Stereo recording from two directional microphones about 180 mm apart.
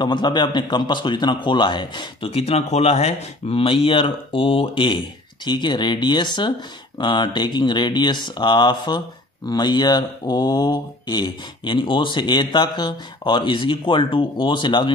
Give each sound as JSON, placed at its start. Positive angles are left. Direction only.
{"t": 0.0, "sound": "a man's voice", "side_deg": 25}